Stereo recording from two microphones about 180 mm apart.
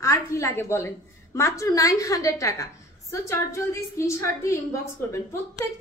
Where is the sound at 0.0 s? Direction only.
15° left (ahead or behind).